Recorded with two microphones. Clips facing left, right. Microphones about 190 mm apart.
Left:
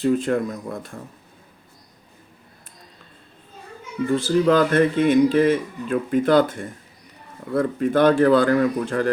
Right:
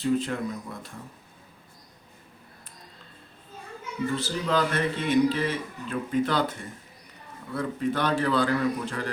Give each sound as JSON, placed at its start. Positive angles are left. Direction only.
{"t": 0.0, "sound": "speech", "side_deg": 50}
{"t": 4.1, "sound": "speech", "side_deg": 50}